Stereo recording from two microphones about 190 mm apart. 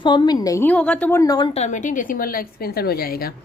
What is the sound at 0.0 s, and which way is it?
A woman's voice, 25° left (ahead or behind).